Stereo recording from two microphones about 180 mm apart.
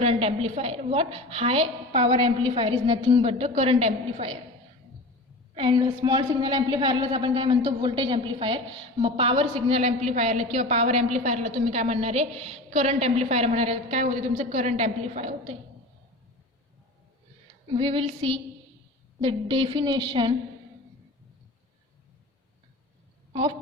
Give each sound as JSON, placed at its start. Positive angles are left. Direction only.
{"t": 0.0, "sound": "a woman's voice", "side_deg": -35}
{"t": 5.5, "sound": "a woman's voice", "side_deg": -30}
{"t": 17.7, "sound": "a woman's voice", "side_deg": -30}